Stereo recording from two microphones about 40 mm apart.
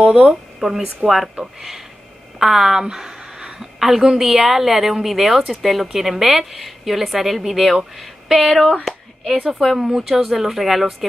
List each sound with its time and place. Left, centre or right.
0.0 s speech: right
0.6 s a woman's voice: centre
2.3 s a sound: centre
4.2 s a woman's voice: centre